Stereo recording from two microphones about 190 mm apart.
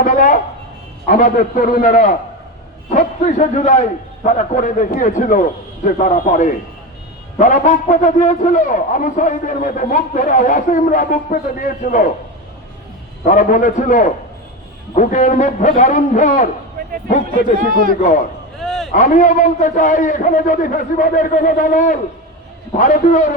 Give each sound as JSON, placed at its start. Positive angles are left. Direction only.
{"t": 0.0, "sound": "a man's voice", "side_deg": 45}
{"t": 13.2, "sound": "a man's voice", "side_deg": 45}
{"t": 18.6, "sound": "a sound", "side_deg": 0}
{"t": 18.9, "sound": "a man's voice", "side_deg": 45}